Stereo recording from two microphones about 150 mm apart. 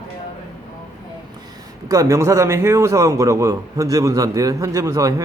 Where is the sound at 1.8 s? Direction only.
20° right (ahead or behind).